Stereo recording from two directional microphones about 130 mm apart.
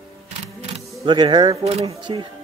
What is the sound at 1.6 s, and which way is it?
Speech, 50° right (ahead or behind).